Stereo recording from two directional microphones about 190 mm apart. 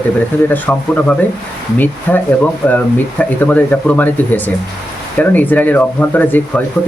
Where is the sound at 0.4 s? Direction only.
10° left (ahead or behind).